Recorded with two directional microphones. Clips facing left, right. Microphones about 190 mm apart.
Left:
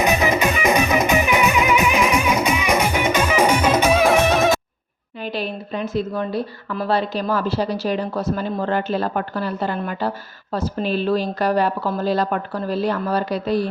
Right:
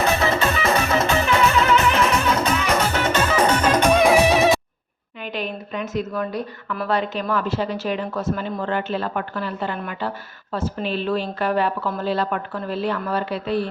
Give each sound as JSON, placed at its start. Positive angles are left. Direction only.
{"t": 0.0, "sound": "music", "side_deg": 15}
{"t": 5.2, "sound": "speech", "side_deg": 35}